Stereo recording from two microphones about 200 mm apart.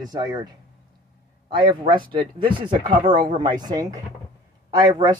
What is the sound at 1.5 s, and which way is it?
Speech, 20° right (ahead or behind).